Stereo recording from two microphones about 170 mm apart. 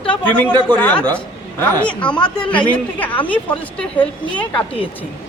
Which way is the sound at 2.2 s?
30° left (ahead or behind).